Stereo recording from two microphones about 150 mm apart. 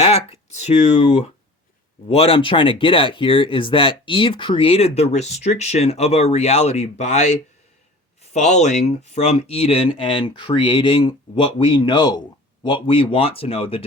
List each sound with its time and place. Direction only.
0.0 s speech: 45° left (ahead or behind)